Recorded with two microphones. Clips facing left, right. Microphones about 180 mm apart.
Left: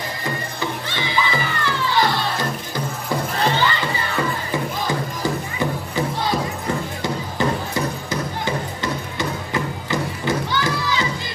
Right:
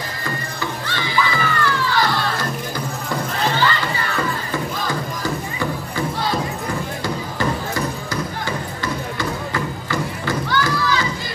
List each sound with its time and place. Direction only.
0.6 s music: 20° left (ahead or behind)
4.5 s music: 20° left (ahead or behind)